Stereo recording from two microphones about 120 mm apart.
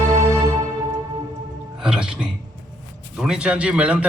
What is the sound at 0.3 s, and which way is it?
Music, 30° right (ahead or behind).